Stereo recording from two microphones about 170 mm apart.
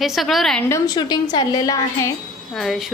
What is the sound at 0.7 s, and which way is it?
A woman's voice, 25° left (ahead or behind).